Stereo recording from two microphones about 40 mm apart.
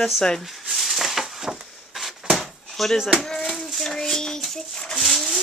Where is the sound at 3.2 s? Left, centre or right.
Centre.